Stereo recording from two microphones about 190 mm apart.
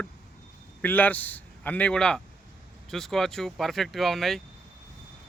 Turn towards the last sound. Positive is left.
turn(degrees=0)  # may be behind; listen again after turning